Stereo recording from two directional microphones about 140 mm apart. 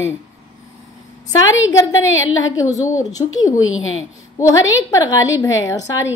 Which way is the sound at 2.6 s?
25° left (ahead or behind).